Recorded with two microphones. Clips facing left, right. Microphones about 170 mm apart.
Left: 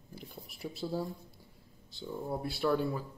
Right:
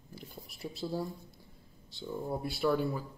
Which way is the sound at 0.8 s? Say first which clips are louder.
Even; 5° right (ahead or behind).